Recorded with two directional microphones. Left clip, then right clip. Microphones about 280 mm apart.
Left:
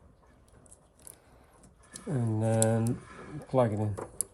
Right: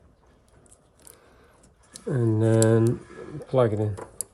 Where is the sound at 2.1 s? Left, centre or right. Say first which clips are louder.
Right 8 dB; right.